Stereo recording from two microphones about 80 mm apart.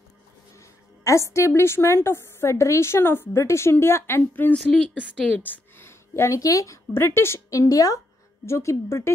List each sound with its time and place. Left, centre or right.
1.0 s a woman's voice: left
4.6 s speech: centre
5.4 s a woman's voice: left
6.9 s a woman's voice: left
8.5 s a woman's voice: left